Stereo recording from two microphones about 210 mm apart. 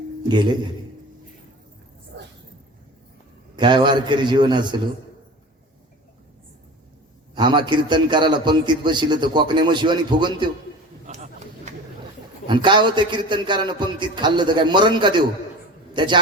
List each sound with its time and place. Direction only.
0.3 s a man's voice: 20° right (ahead or behind)
3.5 s a man's voice: 20° right (ahead or behind)
7.3 s a man's voice: 20° right (ahead or behind)
11.0 s a sound: 35° right (ahead or behind)
12.5 s a man's voice: 20° right (ahead or behind)